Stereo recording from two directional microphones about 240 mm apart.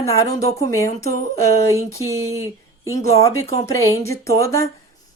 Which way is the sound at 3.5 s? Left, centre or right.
Centre.